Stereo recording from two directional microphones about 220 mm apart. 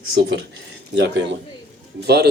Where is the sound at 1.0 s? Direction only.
50° right (ahead or behind).